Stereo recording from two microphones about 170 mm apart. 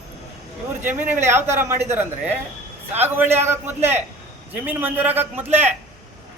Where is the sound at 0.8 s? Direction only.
10° right (ahead or behind).